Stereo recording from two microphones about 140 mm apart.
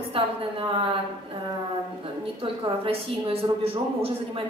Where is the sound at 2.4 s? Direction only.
40° right (ahead or behind).